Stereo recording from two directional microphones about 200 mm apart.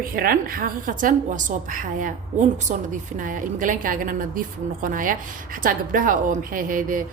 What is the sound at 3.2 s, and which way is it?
A woman's voice, 40° right (ahead or behind).